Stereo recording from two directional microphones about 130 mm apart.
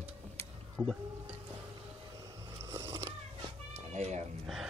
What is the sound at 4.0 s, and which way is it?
Speech, 55° right (ahead or behind).